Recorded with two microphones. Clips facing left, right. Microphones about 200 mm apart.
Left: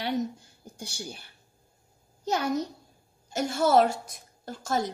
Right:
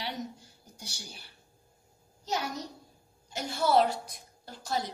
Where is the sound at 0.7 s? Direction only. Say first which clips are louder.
Left 8 dB; 55° left (ahead or behind).